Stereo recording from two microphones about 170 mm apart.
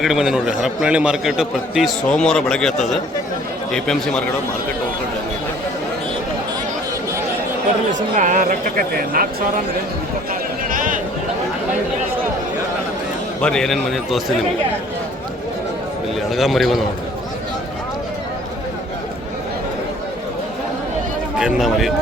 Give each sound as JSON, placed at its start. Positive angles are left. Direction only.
{"t": 0.0, "sound": "a man's voice", "side_deg": 0}
{"t": 7.9, "sound": "speech", "side_deg": -50}
{"t": 10.7, "sound": "a sound", "side_deg": -50}
{"t": 13.4, "sound": "a man's voice", "side_deg": 5}
{"t": 16.3, "sound": "a man's voice", "side_deg": 0}
{"t": 21.3, "sound": "a man's voice", "side_deg": -5}